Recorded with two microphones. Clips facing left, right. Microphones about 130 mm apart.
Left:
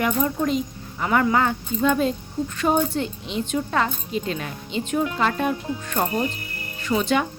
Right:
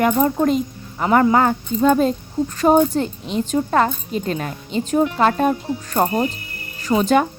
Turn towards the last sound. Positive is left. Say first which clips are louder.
# right 5 dB
turn(degrees=-45)  # may be behind; listen again after turning